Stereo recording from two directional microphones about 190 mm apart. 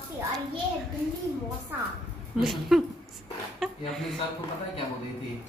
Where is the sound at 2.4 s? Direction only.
Centre (ahead or behind).